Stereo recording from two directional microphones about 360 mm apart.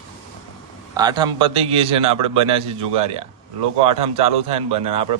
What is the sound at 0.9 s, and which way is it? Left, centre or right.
A man's voice, centre.